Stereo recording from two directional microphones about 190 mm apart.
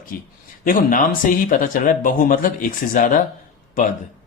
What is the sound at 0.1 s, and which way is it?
Speech, 50° left (ahead or behind).